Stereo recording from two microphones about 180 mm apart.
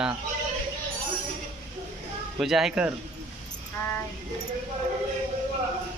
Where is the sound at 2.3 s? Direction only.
Centre (ahead or behind).